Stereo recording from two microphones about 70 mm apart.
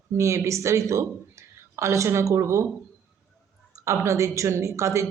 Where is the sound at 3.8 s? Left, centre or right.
Right.